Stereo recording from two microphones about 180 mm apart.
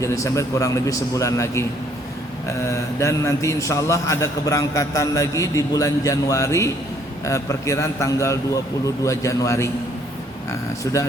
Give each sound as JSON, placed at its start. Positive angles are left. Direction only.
{"t": 0.0, "sound": "a man's voice", "side_deg": 15}